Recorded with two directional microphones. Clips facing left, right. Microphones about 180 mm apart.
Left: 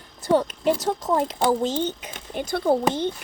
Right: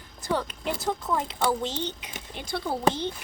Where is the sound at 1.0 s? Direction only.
40° left (ahead or behind).